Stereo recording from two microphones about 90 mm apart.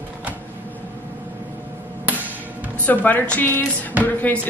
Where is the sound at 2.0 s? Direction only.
20° right (ahead or behind).